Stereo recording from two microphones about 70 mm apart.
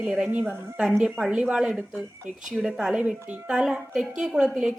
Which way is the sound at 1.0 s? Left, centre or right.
Centre.